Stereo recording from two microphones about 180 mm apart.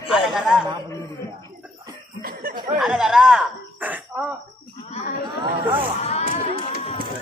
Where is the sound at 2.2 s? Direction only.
55° right (ahead or behind).